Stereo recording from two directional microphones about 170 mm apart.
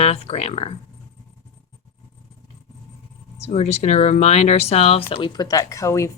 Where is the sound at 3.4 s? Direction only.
40° left (ahead or behind).